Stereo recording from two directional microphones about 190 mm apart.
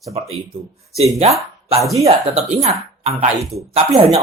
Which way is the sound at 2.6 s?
35° right (ahead or behind).